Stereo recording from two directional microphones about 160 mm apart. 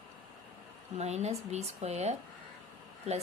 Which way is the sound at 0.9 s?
45° right (ahead or behind).